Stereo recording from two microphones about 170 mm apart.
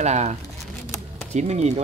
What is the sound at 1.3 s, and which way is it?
Speech, 40° right (ahead or behind).